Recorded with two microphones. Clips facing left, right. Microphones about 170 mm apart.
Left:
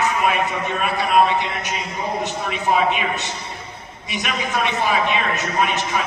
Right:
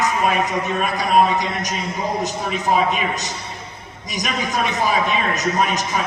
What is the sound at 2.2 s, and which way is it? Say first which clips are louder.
Speech: right 1 dB; 40° right (ahead or behind).